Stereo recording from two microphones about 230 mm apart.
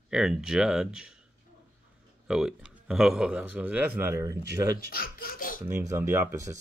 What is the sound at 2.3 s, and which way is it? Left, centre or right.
Speech, centre.